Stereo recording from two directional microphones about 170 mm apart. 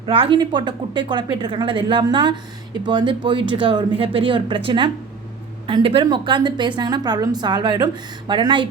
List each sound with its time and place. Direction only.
0.0 s a woman's voice: 30° right (ahead or behind)